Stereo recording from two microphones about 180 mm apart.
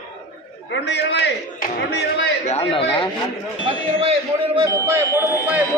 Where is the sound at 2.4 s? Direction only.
35° left (ahead or behind).